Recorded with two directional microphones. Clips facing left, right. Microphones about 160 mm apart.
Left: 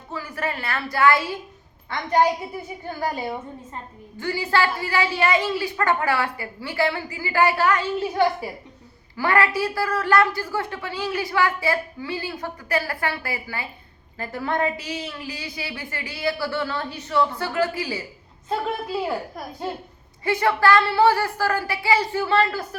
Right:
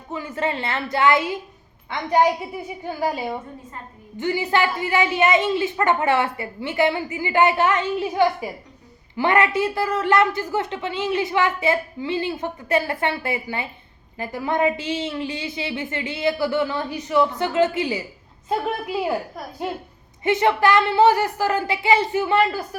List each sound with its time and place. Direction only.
0.1 s a woman's voice: 20° right (ahead or behind)
20.2 s a woman's voice: 20° right (ahead or behind)